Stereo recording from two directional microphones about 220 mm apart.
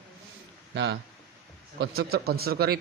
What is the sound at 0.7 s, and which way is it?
Speech, 50° right (ahead or behind).